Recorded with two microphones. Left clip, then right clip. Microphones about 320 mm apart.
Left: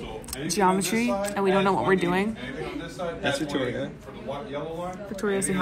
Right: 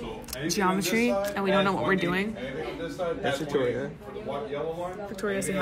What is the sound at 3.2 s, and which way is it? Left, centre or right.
Speech, right.